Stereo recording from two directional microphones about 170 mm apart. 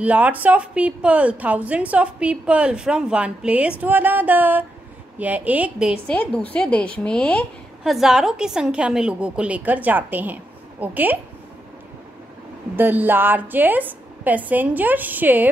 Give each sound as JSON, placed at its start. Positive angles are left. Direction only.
{"t": 0.0, "sound": "a woman's voice", "side_deg": -10}
{"t": 6.0, "sound": "a woman's voice", "side_deg": 5}
{"t": 12.7, "sound": "a woman's voice", "side_deg": -10}